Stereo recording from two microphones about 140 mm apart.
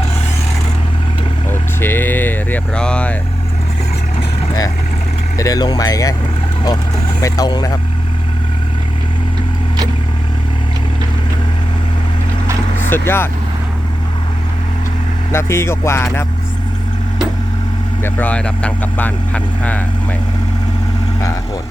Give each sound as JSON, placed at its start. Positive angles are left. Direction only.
{"t": 1.5, "sound": "vehicle", "side_deg": 15}
{"t": 5.4, "sound": "speech", "side_deg": 25}
{"t": 7.2, "sound": "speech", "side_deg": 25}
{"t": 12.9, "sound": "speech", "side_deg": 15}
{"t": 15.3, "sound": "speech", "side_deg": 20}
{"t": 18.0, "sound": "speech", "side_deg": 10}